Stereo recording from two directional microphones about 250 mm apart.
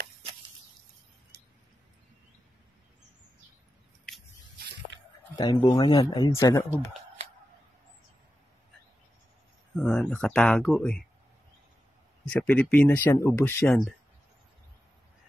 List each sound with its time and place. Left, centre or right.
4.9 s squish: right
5.3 s speech: centre
9.8 s speech: centre
12.3 s speech: centre